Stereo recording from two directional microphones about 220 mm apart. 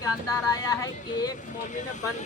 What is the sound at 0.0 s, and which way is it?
Speech, 15° left (ahead or behind).